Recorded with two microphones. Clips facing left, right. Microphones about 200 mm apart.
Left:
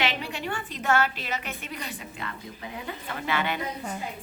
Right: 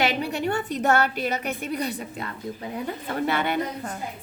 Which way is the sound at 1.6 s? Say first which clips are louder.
Right 9 dB; 40° right (ahead or behind).